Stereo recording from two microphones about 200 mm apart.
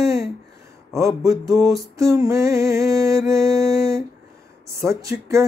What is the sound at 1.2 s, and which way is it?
Music, 15° right (ahead or behind).